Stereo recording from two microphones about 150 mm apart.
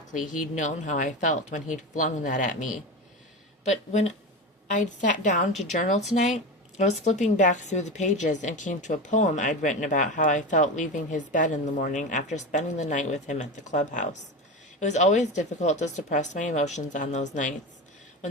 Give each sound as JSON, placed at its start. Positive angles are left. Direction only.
{"t": 0.1, "sound": "a woman's voice", "side_deg": 60}
{"t": 3.6, "sound": "a woman's voice", "side_deg": 50}